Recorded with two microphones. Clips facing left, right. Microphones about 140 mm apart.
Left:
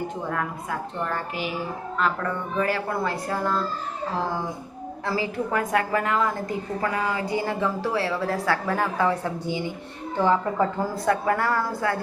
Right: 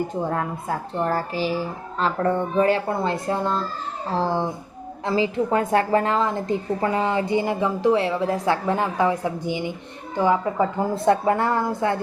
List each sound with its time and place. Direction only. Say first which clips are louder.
0.3 s a woman's voice: right 3 dB; 30° right (ahead or behind); by 10.7 s 15° right (ahead or behind)
10.9 s a woman's voice: right 6 dB; 25° right (ahead or behind)